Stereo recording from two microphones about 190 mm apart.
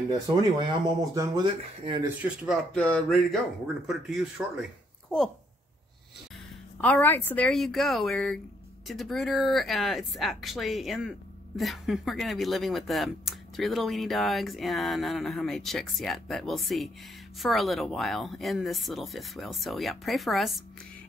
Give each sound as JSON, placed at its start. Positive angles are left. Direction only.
{"t": 0.4, "sound": "speech", "side_deg": -25}
{"t": 2.4, "sound": "speech", "side_deg": 0}
{"t": 6.8, "sound": "speech", "side_deg": 10}